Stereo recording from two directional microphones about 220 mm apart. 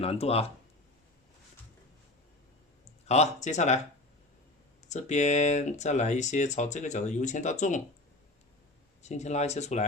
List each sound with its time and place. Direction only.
0.0 s speech: 25° left (ahead or behind)
3.1 s speech: 30° left (ahead or behind)
4.9 s speech: 30° left (ahead or behind)
9.0 s speech: 30° left (ahead or behind)